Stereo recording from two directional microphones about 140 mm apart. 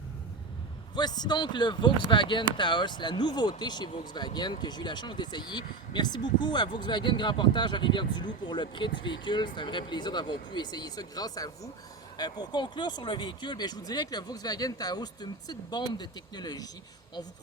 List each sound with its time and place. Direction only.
0.9 s speech: 30° left (ahead or behind)